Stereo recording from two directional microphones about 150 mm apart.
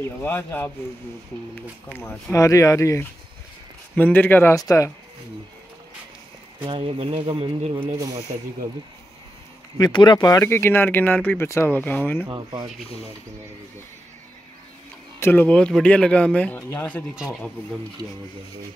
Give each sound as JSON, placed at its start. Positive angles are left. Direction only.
{"t": 0.2, "sound": "speech", "side_deg": 15}
{"t": 1.9, "sound": "speech", "side_deg": 10}
{"t": 6.6, "sound": "speech", "side_deg": -35}
{"t": 8.3, "sound": "speech", "side_deg": -50}
{"t": 9.8, "sound": "speech", "side_deg": 30}
{"t": 12.3, "sound": "speech", "side_deg": -30}
{"t": 15.1, "sound": "speech", "side_deg": 15}
{"t": 17.1, "sound": "speech", "side_deg": 0}